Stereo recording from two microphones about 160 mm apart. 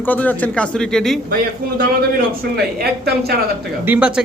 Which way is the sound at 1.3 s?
65° right (ahead or behind).